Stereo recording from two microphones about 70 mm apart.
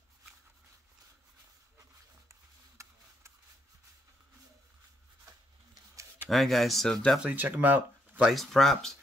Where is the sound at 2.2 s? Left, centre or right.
Right.